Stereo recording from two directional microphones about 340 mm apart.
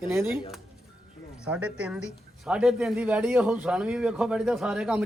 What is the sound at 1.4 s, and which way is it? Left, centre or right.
Speech, centre.